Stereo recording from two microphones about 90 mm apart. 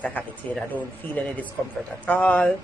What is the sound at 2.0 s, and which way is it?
Speech, 15° left (ahead or behind).